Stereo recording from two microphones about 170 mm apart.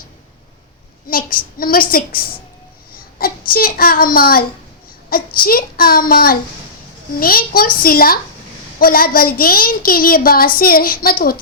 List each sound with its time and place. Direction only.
1.0 s a woman's voice: 55° left (ahead or behind)